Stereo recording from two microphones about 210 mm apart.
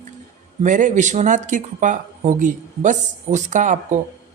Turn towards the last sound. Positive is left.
turn(degrees=-35)  # may be behind; listen again after turning